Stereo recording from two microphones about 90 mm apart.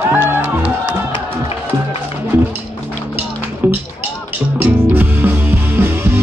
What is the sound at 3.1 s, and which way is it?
Music, 20° right (ahead or behind).